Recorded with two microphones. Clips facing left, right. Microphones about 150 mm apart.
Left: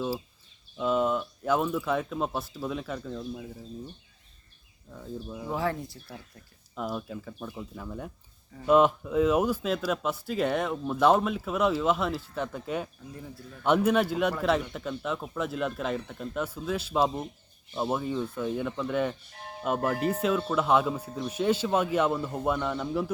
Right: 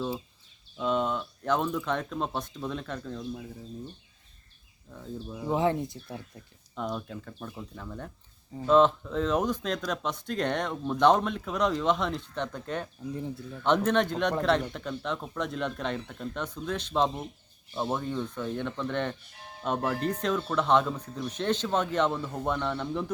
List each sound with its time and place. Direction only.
0.8 s speech: 5° left (ahead or behind)
4.9 s speech: centre (ahead or behind)
5.5 s speech: 20° right (ahead or behind)
6.7 s speech: 5° left (ahead or behind)
13.1 s speech: 25° right (ahead or behind)
13.7 s speech: 10° left (ahead or behind)